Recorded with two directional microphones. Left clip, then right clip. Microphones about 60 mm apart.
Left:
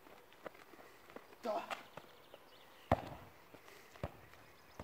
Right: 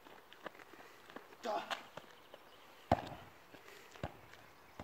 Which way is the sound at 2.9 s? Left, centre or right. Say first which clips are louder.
Right 1 dB; right.